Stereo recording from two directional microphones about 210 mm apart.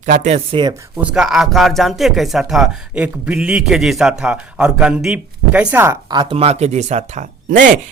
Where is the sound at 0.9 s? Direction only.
5° right (ahead or behind).